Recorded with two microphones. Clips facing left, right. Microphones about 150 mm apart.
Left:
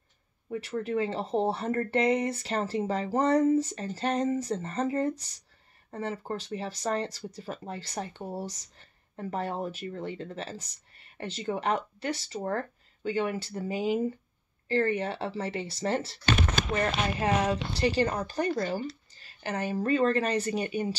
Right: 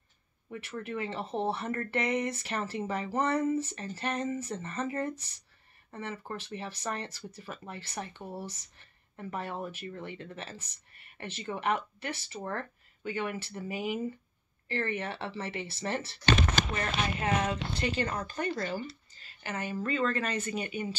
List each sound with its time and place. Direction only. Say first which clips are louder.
0.5 s speech: left 7 dB; 35° left (ahead or behind)
17.2 s speech: left 5 dB; 35° left (ahead or behind)